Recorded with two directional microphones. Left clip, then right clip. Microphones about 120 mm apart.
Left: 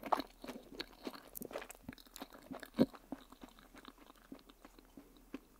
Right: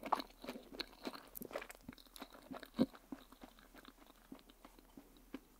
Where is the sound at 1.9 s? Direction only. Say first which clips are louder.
Left 3 dB; 35° left (ahead or behind).